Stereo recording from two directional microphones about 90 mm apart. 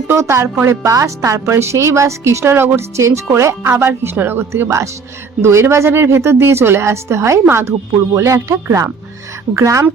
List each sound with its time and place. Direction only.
0.1 s a woman's voice: 30° right (ahead or behind)